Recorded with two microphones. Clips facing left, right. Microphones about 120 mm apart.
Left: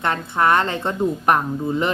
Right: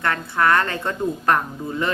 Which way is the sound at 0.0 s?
20° left (ahead or behind).